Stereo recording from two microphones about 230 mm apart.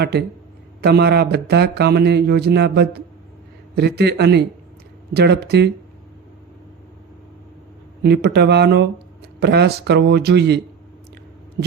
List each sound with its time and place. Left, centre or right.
0.0 s speech: right
8.0 s speech: right